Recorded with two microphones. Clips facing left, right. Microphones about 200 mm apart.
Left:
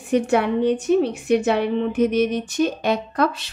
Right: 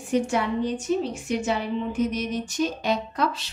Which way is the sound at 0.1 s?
60° left (ahead or behind).